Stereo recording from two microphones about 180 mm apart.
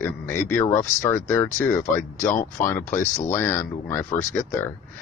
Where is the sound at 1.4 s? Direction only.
45° left (ahead or behind).